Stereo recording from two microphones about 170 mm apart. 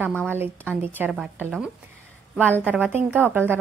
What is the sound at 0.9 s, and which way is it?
A woman's voice, 5° right (ahead or behind).